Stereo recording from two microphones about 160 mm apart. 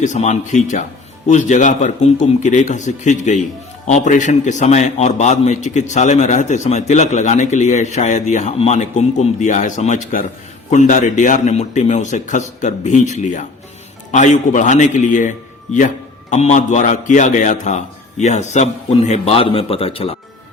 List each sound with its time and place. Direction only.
0.0 s a man's voice: 50° left (ahead or behind)